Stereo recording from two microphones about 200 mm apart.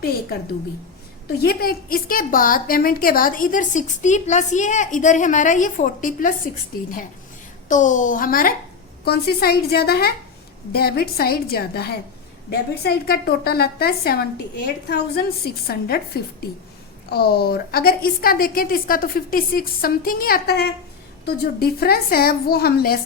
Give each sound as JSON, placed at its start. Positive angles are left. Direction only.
{"t": 1.4, "sound": "a woman's voice", "side_deg": 50}
{"t": 7.7, "sound": "a woman's voice", "side_deg": 40}